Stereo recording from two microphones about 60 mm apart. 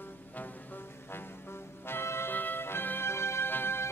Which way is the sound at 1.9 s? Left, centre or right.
Left.